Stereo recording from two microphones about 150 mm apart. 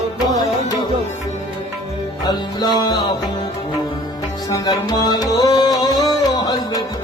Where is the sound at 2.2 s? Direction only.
25° left (ahead or behind).